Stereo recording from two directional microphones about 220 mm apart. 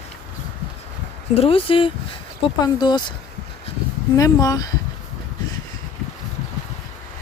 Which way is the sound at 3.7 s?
25° left (ahead or behind).